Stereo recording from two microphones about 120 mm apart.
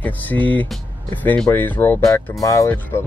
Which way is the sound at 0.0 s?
15° left (ahead or behind).